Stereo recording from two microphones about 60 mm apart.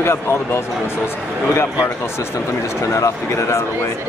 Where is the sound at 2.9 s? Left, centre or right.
Left.